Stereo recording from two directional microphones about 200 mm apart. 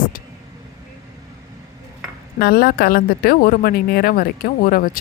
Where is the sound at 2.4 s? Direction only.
50° left (ahead or behind).